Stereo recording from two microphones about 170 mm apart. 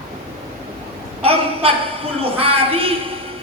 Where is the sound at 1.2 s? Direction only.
35° right (ahead or behind).